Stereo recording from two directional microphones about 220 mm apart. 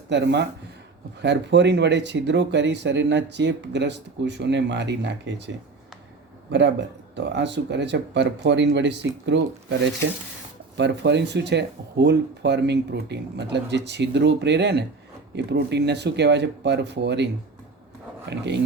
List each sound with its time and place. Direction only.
0.1 s speech: 50° right (ahead or behind)
6.5 s speech: 55° right (ahead or behind)
10.8 s speech: 50° right (ahead or behind)
18.3 s speech: 50° right (ahead or behind)